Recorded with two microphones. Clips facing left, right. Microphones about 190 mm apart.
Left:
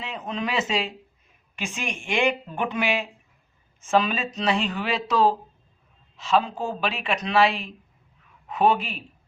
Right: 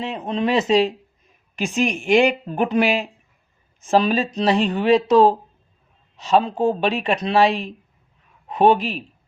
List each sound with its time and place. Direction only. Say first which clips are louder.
0.0 s speech: right 7 dB; 35° right (ahead or behind)